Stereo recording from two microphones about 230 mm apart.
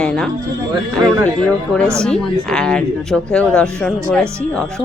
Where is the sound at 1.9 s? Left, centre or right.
Centre.